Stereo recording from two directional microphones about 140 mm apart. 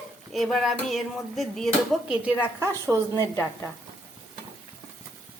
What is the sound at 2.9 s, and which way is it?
Speech, 25° right (ahead or behind).